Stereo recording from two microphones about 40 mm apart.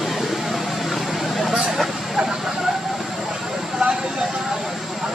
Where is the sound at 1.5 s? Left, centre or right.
Centre.